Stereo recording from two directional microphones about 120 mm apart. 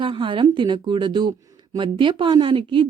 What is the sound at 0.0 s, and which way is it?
A woman's voice, 45° right (ahead or behind).